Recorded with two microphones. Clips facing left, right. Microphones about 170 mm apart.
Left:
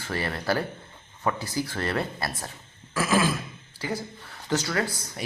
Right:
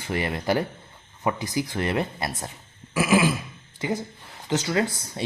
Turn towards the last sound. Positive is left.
turn(degrees=-20)  # may be behind; listen again after turning